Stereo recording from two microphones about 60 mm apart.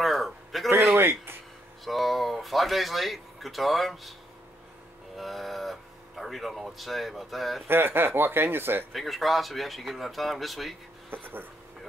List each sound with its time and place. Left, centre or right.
0.0 s a sound: centre
0.9 s speech: right
1.9 s speech: centre
5.1 s speech: centre
7.6 s speech: right
8.9 s speech: centre